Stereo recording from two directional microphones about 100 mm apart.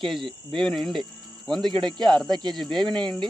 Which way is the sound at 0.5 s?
5° left (ahead or behind).